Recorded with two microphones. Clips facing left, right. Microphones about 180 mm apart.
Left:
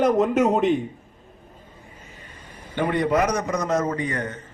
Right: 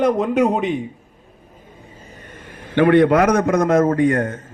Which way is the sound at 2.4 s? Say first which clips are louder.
Right 10 dB; 80° right.